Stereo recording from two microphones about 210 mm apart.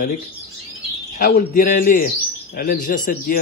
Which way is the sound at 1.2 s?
40° left (ahead or behind).